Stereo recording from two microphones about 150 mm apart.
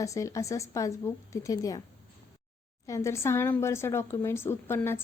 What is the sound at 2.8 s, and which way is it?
A woman's voice, 20° left (ahead or behind).